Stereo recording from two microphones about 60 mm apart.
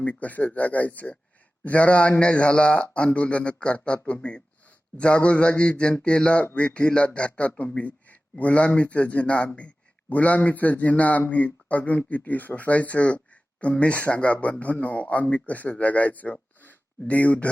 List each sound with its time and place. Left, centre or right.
0.0 s speech: left